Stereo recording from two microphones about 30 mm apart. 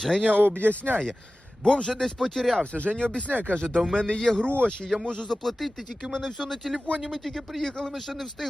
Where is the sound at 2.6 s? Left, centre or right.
Left.